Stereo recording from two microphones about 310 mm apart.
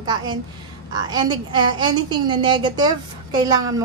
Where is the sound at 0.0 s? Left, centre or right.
Centre.